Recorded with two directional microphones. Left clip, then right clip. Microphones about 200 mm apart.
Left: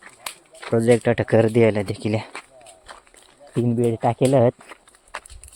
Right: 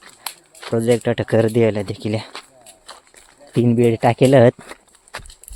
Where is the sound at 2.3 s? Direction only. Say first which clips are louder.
Right 1 dB; 20° right (ahead or behind).